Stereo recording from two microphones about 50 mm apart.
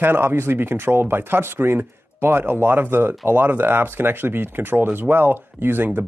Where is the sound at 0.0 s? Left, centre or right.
Right.